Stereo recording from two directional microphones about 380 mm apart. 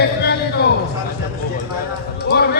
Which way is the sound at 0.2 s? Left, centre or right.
Left.